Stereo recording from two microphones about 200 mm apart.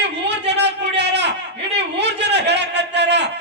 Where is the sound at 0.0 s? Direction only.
60° right (ahead or behind).